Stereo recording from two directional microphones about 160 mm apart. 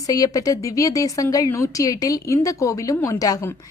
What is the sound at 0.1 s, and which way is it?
A woman's voice, 20° left (ahead or behind).